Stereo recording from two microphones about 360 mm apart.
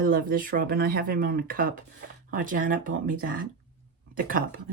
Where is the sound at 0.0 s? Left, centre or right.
Right.